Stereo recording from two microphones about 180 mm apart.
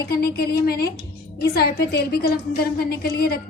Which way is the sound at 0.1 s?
60° left (ahead or behind).